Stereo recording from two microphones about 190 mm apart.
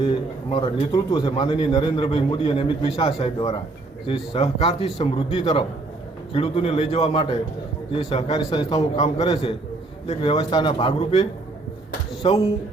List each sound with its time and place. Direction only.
0.0 s a man's voice: 25° left (ahead or behind)